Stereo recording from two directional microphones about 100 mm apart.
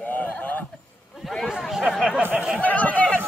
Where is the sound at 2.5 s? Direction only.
15° left (ahead or behind).